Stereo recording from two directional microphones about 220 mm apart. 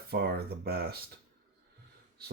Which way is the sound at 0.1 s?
45° right (ahead or behind).